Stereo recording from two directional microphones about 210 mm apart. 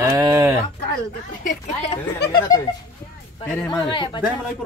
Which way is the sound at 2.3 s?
15° left (ahead or behind).